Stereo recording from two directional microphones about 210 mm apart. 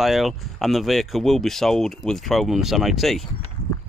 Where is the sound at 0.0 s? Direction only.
Centre (ahead or behind).